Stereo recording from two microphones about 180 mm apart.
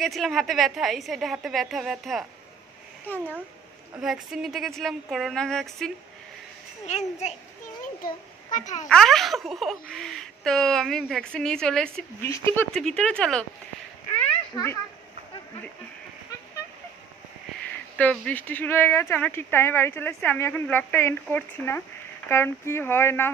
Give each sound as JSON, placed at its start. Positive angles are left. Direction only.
{"t": 0.0, "sound": "speech", "side_deg": 0}
{"t": 3.1, "sound": "speech", "side_deg": 10}
{"t": 4.0, "sound": "speech", "side_deg": 0}
{"t": 6.9, "sound": "a child's voice", "side_deg": 40}
{"t": 8.8, "sound": "speech", "side_deg": 0}
{"t": 14.5, "sound": "a child's voice", "side_deg": 15}
{"t": 18.1, "sound": "speech", "side_deg": 5}